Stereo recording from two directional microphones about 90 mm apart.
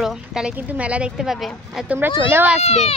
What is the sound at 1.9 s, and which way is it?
Speech, 25° right (ahead or behind).